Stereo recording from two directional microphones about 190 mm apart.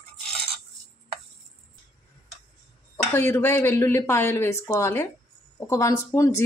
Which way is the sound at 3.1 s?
15° left (ahead or behind).